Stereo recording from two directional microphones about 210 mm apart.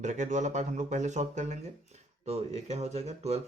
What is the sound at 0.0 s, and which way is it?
Speech, 35° right (ahead or behind).